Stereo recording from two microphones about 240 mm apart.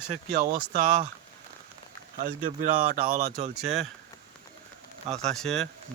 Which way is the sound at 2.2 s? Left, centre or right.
Right.